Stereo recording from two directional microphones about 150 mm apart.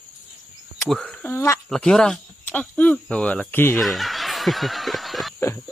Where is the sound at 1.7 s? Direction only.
5° left (ahead or behind).